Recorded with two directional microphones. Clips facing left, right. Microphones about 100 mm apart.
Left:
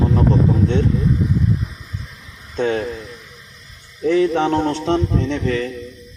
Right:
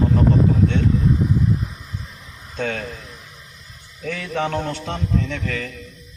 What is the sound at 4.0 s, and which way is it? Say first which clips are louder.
A man's voice: left 9 dB; 25° left (ahead or behind).